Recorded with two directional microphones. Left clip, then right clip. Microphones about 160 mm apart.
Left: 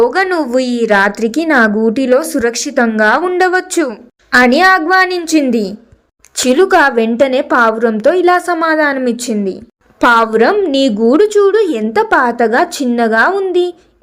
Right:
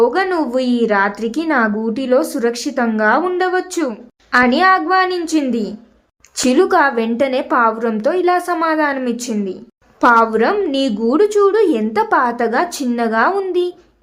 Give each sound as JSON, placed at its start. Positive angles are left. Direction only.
{"t": 0.0, "sound": "a woman's voice", "side_deg": 25}